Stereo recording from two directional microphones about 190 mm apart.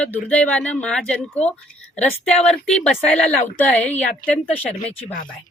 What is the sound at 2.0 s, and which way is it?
Speech, 35° left (ahead or behind).